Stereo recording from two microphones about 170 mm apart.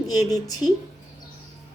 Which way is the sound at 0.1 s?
20° left (ahead or behind).